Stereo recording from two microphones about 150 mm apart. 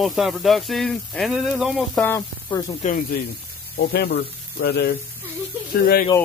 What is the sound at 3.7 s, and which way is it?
Speech, 90° left.